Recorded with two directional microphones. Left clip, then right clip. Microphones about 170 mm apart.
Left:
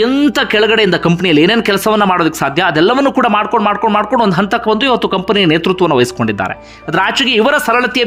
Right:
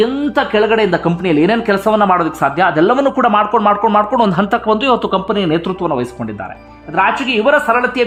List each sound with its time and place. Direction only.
0.0 s speech: 15° left (ahead or behind)